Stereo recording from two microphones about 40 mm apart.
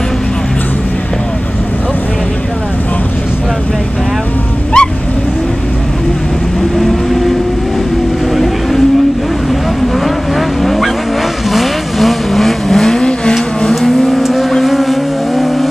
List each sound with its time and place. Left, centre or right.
4.7 s vehicle: left
10.6 s vehicle: centre